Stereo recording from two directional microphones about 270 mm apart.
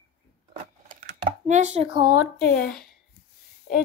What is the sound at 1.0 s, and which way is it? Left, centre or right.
Speech, right.